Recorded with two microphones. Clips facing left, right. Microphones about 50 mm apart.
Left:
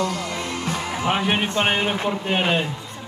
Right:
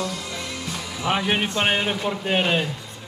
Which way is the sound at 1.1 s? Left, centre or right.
Centre.